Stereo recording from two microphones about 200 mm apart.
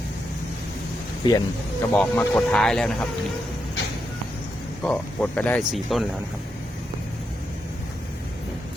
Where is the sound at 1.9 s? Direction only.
5° left (ahead or behind).